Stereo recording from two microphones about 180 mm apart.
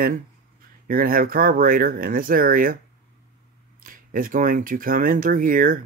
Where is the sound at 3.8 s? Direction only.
50° right (ahead or behind).